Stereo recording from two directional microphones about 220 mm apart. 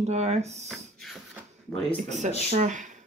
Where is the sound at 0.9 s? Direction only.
Centre (ahead or behind).